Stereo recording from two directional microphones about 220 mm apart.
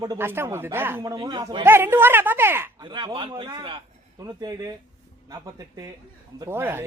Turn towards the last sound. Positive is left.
turn(degrees=-10)  # may be behind; listen again after turning